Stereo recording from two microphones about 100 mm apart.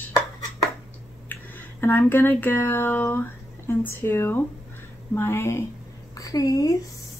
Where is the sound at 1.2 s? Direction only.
20° left (ahead or behind).